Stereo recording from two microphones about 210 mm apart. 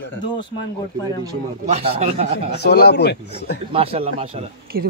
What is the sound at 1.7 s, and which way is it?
Speech, 30° right (ahead or behind).